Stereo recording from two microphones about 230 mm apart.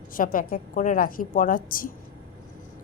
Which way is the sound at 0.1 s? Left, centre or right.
Left.